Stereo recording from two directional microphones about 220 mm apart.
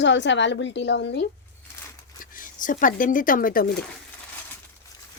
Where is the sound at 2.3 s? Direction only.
35° left (ahead or behind).